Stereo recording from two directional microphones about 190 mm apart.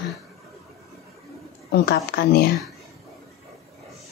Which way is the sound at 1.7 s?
55° left (ahead or behind).